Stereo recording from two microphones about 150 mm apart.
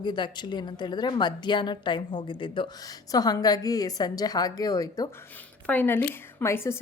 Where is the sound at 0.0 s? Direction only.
30° left (ahead or behind).